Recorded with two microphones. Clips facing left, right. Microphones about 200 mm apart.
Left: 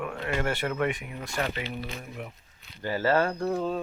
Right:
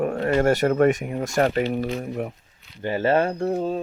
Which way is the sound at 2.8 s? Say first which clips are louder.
Right 4 dB; 20° right (ahead or behind).